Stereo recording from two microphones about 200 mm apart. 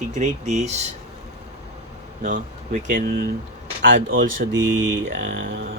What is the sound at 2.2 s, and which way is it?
Speech, 40° right (ahead or behind).